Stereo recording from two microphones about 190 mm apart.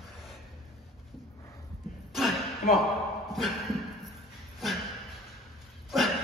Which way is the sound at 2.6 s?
50° left (ahead or behind).